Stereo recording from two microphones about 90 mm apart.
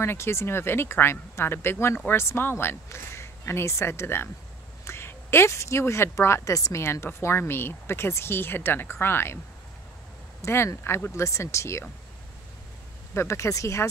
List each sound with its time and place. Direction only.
0.0 s speech: 30° left (ahead or behind)
10.4 s speech: 30° left (ahead or behind)
13.1 s speech: 30° left (ahead or behind)